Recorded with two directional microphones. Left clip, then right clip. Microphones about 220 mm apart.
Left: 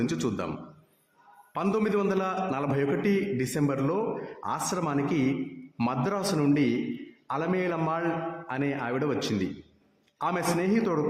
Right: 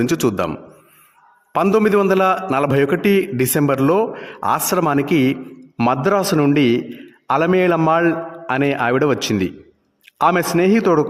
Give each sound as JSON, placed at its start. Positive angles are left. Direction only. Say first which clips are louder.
{"t": 0.0, "sound": "a man's voice", "louder": "right 12 dB", "side_deg": -45}
{"t": 1.5, "sound": "a man's voice", "louder": "right 13 dB", "side_deg": -45}